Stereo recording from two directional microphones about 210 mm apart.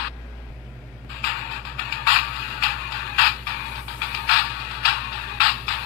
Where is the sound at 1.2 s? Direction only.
45° left (ahead or behind).